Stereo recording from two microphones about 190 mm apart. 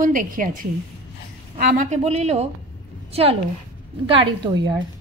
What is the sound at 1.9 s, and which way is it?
A woman's voice, 35° right (ahead or behind).